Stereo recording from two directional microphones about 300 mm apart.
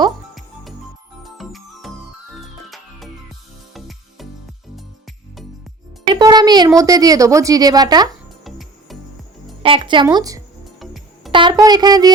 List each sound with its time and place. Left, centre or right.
1.2 s music: centre
6.1 s speech: centre
8.4 s music: centre
9.6 s speech: centre
10.8 s music: centre
11.3 s a child's voice: centre